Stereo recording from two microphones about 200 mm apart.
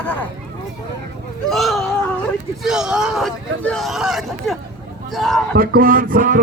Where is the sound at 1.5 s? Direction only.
Centre (ahead or behind).